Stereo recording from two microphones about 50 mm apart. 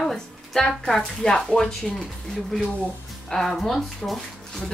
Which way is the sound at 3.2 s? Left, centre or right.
Centre.